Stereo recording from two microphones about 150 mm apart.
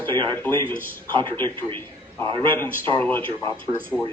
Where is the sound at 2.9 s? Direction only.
15° left (ahead or behind).